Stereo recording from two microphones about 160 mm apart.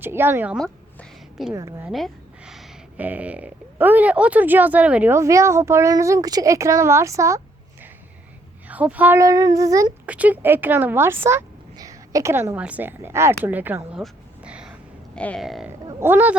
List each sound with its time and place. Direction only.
0.0 s speech: 15° right (ahead or behind)
0.5 s a sound: centre (ahead or behind)
1.5 s a child's voice: 20° right (ahead or behind)
1.8 s a child's voice: centre (ahead or behind); by 9.9 s 20° right (ahead or behind)
10.1 s speech: 10° right (ahead or behind)
14.0 s a sound: 5° right (ahead or behind)
15.1 s speech: 5° left (ahead or behind)
16.0 s speech: 15° right (ahead or behind)